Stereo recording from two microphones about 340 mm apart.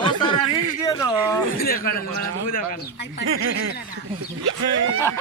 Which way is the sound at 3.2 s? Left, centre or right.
Right.